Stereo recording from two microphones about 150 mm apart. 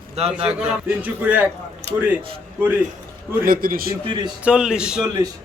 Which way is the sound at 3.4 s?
75° right (ahead or behind).